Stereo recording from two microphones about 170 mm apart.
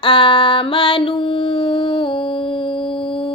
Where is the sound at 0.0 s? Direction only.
30° left (ahead or behind).